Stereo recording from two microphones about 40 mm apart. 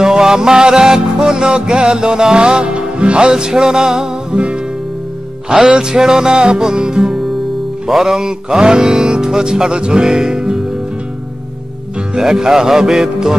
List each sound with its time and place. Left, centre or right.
0.0 s music: centre
4.3 s music: right
6.3 s music: right
10.0 s music: centre
12.2 s music: centre